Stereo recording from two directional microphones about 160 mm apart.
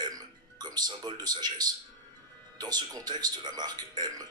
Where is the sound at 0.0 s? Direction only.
25° right (ahead or behind).